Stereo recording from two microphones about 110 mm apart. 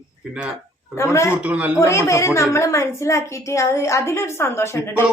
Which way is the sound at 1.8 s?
25° left (ahead or behind).